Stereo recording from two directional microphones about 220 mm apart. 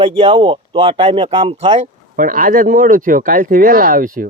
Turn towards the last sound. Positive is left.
turn(degrees=-40)  # may be behind; listen again after turning